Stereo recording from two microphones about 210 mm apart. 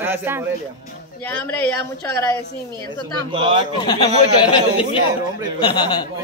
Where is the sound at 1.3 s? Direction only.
10° left (ahead or behind).